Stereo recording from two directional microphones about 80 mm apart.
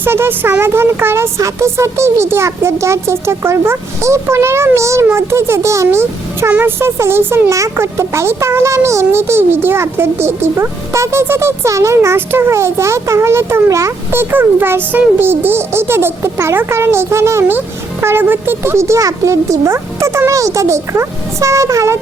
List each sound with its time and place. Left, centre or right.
0.0 s speech: right